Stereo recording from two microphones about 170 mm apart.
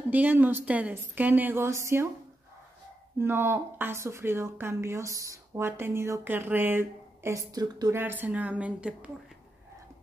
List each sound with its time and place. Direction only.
0.1 s speech: 10° right (ahead or behind)
3.2 s speech: 15° right (ahead or behind)